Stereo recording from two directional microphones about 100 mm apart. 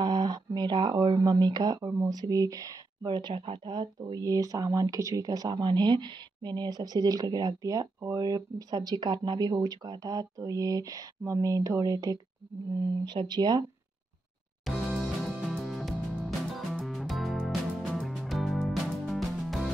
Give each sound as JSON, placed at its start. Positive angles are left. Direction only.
{"t": 0.0, "sound": "speech", "side_deg": -50}
{"t": 3.1, "sound": "speech", "side_deg": -50}
{"t": 13.0, "sound": "speech", "side_deg": -50}
{"t": 14.7, "sound": "music", "side_deg": 0}